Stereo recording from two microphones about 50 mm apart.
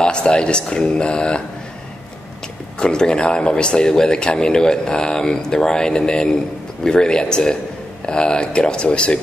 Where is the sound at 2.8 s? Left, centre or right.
Centre.